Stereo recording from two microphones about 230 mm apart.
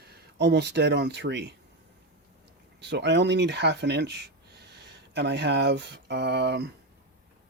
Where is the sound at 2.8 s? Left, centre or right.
Right.